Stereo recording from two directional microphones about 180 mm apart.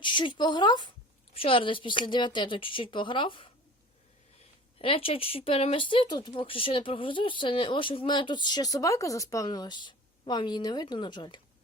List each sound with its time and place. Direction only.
0.0 s speech: 25° left (ahead or behind)
4.8 s speech: 30° left (ahead or behind)